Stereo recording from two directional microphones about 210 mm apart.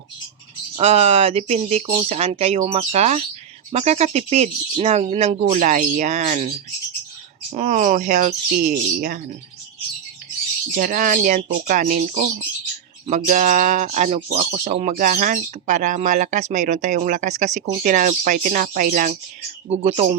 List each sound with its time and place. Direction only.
0.8 s speech: 30° right (ahead or behind)
7.5 s speech: 35° right (ahead or behind)
10.8 s speech: 40° right (ahead or behind)